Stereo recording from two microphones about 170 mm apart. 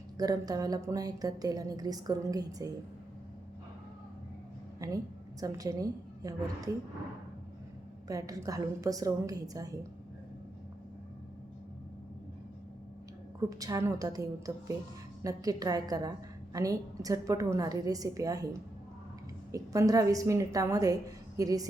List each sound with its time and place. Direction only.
0.2 s a woman's voice: 20° right (ahead or behind)
4.8 s a woman's voice: 20° right (ahead or behind)
8.0 s a woman's voice: 20° right (ahead or behind)
13.5 s a woman's voice: 20° right (ahead or behind)
19.5 s a woman's voice: 20° right (ahead or behind)